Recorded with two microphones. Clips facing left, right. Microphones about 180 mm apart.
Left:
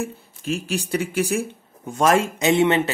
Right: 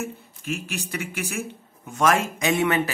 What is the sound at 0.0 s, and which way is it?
Speech, 30° left (ahead or behind).